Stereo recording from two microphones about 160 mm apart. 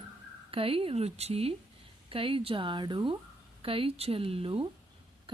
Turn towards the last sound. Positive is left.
turn(degrees=-35)  # may be behind; listen again after turning